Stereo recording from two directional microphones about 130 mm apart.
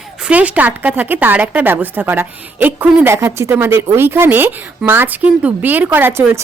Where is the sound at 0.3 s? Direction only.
10° right (ahead or behind).